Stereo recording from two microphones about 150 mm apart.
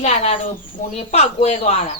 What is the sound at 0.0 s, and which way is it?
Speech, 50° left (ahead or behind).